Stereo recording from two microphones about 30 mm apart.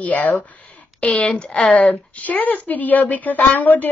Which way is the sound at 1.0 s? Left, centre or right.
Left.